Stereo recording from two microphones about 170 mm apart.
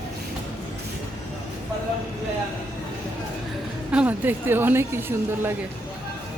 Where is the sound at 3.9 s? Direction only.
10° right (ahead or behind).